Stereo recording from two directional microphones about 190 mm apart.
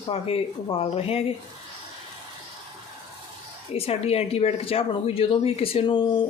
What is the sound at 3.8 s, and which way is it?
Speech, 30° left (ahead or behind).